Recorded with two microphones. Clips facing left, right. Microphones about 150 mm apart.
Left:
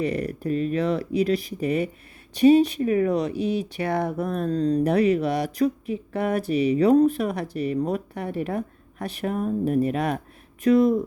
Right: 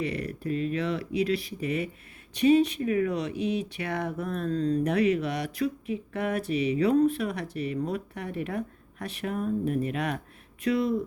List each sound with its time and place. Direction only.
0.0 s speech: 40° left (ahead or behind)